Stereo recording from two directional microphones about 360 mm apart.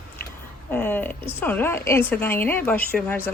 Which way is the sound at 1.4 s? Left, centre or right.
Centre.